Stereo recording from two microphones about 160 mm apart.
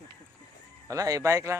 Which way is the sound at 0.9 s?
20° right (ahead or behind).